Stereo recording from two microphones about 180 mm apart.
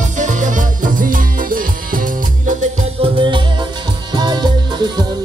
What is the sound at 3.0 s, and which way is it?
Music, 30° right (ahead or behind).